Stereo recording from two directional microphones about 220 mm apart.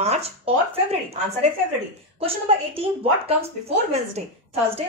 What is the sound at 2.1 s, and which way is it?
Speech, 25° right (ahead or behind).